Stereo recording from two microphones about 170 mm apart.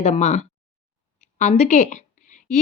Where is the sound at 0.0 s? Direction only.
40° left (ahead or behind).